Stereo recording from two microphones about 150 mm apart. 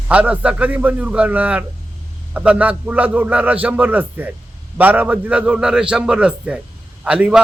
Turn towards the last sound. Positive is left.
turn(degrees=-10)  # may be behind; listen again after turning